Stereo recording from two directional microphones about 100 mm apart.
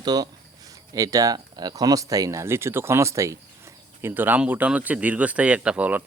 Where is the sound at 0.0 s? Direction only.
40° right (ahead or behind).